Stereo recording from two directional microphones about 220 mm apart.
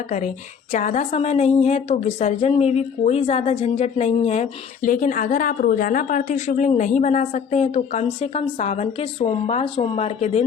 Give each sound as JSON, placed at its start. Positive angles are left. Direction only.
{"t": 0.7, "sound": "a woman's voice", "side_deg": 35}